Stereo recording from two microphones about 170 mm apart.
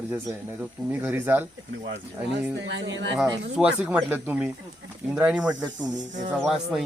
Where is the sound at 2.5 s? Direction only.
90° right.